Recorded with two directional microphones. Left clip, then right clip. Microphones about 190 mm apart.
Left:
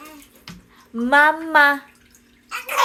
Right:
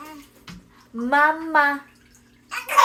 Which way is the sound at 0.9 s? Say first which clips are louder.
Left 3 dB; 25° left (ahead or behind).